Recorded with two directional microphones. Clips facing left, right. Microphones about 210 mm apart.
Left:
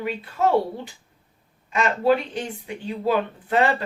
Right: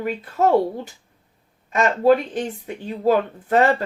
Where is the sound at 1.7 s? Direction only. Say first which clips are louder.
Right 4 dB; 45° right (ahead or behind).